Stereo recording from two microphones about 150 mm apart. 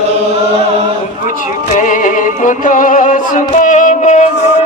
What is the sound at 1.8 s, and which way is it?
Music, 60° left (ahead or behind).